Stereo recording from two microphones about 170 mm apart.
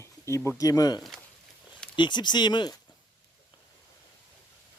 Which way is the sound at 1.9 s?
25° left (ahead or behind).